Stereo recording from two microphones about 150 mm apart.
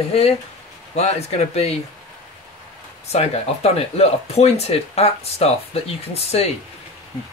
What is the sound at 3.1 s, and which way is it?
Speech, 45° left (ahead or behind).